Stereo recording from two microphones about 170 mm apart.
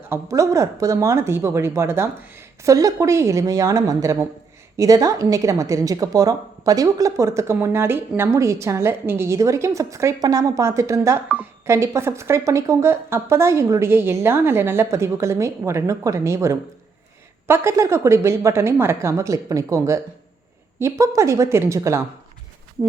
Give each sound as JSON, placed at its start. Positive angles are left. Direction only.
{"t": 0.1, "sound": "a woman's voice", "side_deg": -20}
{"t": 21.0, "sound": "a woman's voice", "side_deg": -20}